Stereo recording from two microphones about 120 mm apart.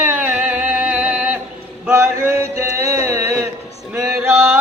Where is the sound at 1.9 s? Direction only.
20° right (ahead or behind).